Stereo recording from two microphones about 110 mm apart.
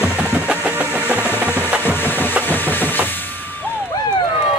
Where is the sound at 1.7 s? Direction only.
15° right (ahead or behind).